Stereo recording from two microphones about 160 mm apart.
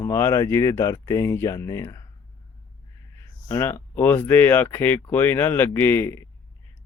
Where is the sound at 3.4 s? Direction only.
15° left (ahead or behind).